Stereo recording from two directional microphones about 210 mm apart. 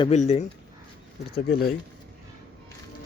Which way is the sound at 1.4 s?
45° left (ahead or behind).